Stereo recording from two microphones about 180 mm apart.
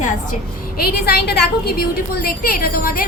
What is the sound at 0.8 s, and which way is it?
A woman's voice, 60° left (ahead or behind).